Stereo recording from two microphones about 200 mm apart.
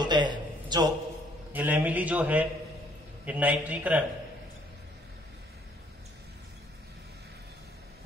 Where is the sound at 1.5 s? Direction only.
10° right (ahead or behind).